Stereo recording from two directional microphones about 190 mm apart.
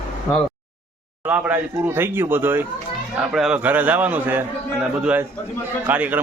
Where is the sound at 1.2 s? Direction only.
10° right (ahead or behind).